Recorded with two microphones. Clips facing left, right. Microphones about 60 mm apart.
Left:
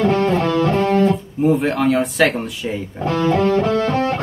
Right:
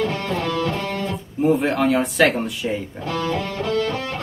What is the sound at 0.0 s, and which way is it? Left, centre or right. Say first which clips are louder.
Music: left 7 dB; left.